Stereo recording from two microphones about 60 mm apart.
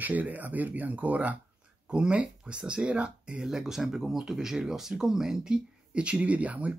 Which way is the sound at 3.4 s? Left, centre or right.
Centre.